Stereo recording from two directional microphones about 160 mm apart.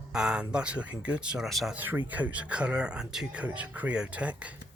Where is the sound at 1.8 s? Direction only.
10° right (ahead or behind).